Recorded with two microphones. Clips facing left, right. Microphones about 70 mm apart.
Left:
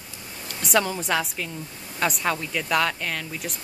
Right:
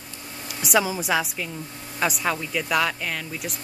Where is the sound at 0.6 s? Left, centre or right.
Centre.